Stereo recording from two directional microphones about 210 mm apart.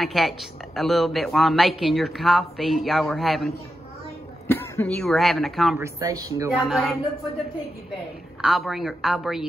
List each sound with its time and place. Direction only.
0.0 s speech: centre (ahead or behind)
5.8 s speech: 15° right (ahead or behind)
6.5 s speech: centre (ahead or behind)
8.4 s speech: centre (ahead or behind)